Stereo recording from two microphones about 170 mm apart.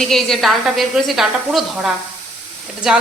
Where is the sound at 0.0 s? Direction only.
Centre (ahead or behind).